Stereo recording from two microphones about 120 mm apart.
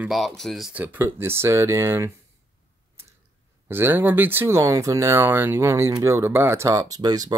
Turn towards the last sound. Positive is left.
turn(degrees=-30)  # may be behind; listen again after turning